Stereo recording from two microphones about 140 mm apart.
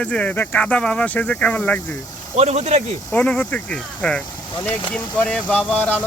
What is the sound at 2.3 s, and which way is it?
Speech, 50° right (ahead or behind).